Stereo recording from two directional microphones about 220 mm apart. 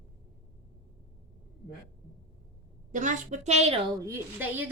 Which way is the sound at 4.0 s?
10° right (ahead or behind).